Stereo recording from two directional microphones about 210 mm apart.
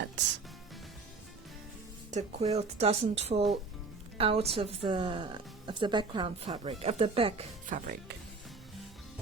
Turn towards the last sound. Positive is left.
turn(degrees=-35)  # may be behind; listen again after turning